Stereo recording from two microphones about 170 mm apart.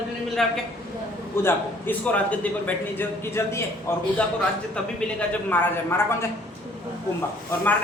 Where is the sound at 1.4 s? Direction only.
10° left (ahead or behind).